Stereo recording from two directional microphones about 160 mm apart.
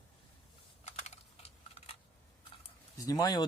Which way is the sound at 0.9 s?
45° left (ahead or behind).